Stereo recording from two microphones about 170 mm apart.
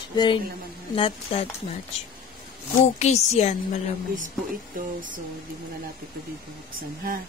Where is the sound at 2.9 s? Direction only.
40° left (ahead or behind).